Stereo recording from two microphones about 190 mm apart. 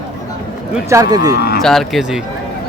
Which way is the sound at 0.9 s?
20° right (ahead or behind).